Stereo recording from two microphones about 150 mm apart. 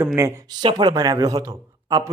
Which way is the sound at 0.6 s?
30° right (ahead or behind).